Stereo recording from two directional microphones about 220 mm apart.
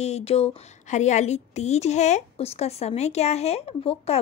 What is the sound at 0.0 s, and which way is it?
A woman's voice, 30° left (ahead or behind).